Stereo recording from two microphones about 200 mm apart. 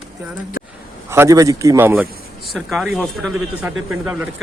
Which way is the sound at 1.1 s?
15° right (ahead or behind).